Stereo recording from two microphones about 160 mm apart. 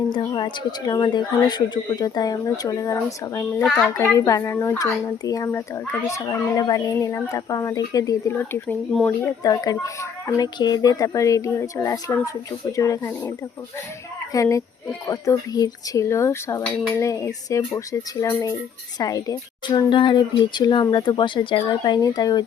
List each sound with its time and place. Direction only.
0.1 s a child's voice: 25° left (ahead or behind)
3.6 s a child's voice: centre (ahead or behind)
3.8 s a child's voice: 15° left (ahead or behind)
14.3 s a child's voice: 20° left (ahead or behind)